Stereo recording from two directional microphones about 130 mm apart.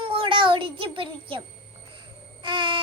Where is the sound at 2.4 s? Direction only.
40° right (ahead or behind).